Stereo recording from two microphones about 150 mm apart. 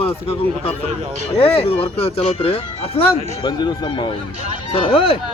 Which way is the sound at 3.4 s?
30° left (ahead or behind).